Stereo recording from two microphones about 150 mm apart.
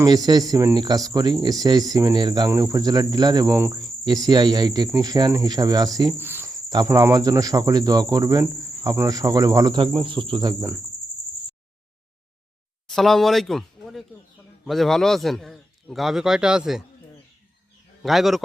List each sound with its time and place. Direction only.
0.0 s cricket: 25° right (ahead or behind)
6.1 s cricket: 15° right (ahead or behind)
12.9 s a man's voice: centre (ahead or behind)
18.0 s a man's voice: centre (ahead or behind)